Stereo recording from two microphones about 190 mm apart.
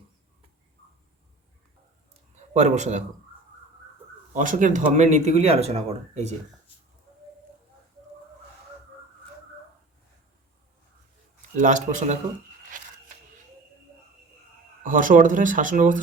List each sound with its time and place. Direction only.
2.5 s speech: 40° right (ahead or behind)
4.4 s speech: 40° right (ahead or behind)
11.5 s speech: 40° right (ahead or behind)
12.6 s a sound: 45° right (ahead or behind)
14.8 s speech: 45° right (ahead or behind)